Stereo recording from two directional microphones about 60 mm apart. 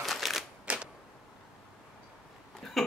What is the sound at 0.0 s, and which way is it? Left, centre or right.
Typewriter, centre.